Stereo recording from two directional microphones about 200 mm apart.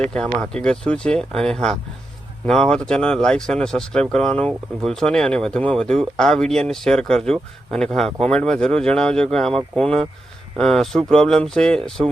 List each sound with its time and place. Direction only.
0.0 s speech: 5° left (ahead or behind)